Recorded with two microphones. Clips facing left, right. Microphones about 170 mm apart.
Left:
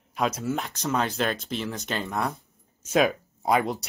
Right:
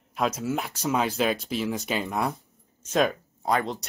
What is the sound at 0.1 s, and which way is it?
Speech, centre (ahead or behind).